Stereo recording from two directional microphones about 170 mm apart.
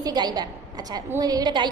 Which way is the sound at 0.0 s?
25° right (ahead or behind).